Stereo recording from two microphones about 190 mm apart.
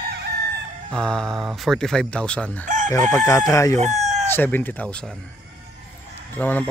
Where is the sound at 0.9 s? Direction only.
5° left (ahead or behind).